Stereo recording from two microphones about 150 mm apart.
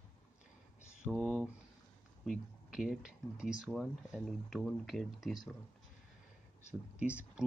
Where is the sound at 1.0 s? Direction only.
10° right (ahead or behind).